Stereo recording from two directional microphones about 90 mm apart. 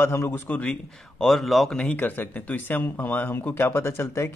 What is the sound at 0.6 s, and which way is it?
Speech, 5° left (ahead or behind).